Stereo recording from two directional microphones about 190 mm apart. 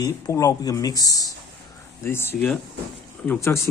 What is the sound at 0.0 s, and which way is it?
Speech, 15° left (ahead or behind).